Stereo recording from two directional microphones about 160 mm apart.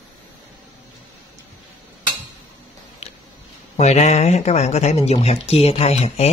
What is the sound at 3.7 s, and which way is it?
Speech, 45° left (ahead or behind).